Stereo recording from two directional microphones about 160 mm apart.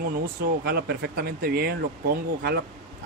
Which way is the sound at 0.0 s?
85° right.